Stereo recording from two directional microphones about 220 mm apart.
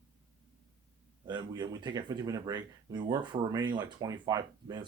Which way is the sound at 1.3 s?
20° right (ahead or behind).